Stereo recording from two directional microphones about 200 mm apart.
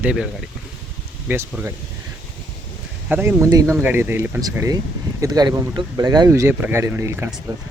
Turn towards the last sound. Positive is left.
turn(degrees=-10)  # may be behind; listen again after turning